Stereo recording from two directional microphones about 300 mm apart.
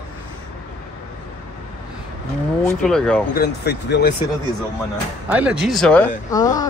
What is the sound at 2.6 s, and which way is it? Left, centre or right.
Speech, centre.